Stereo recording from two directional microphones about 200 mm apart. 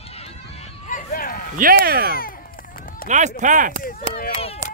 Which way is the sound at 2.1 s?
45° left (ahead or behind).